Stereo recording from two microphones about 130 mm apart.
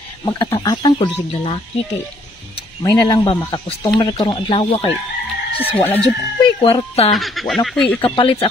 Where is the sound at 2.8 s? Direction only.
25° left (ahead or behind).